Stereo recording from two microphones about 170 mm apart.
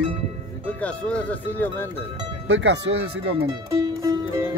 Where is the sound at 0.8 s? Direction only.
10° left (ahead or behind).